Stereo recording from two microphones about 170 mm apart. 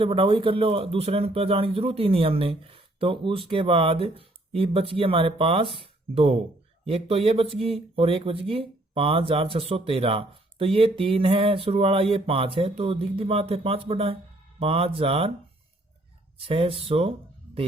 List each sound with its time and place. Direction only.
0.0 s speech: 30° right (ahead or behind)
16.5 s speech: 35° right (ahead or behind)